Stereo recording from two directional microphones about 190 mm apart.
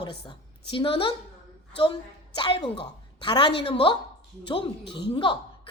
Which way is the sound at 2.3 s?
25° left (ahead or behind).